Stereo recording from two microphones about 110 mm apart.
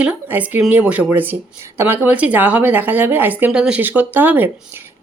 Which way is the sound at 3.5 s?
5° right (ahead or behind).